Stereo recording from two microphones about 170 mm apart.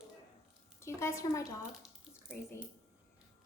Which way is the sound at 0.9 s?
15° left (ahead or behind).